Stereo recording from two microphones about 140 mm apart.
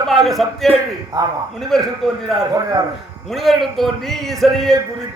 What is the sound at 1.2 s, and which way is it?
Speech, 30° right (ahead or behind).